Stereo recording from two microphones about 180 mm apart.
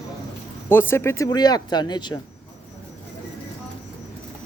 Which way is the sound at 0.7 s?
10° left (ahead or behind).